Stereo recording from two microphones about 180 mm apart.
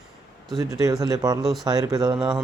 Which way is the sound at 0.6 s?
20° right (ahead or behind).